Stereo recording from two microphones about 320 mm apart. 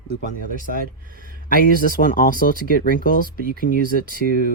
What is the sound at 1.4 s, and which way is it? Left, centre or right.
Speech, left.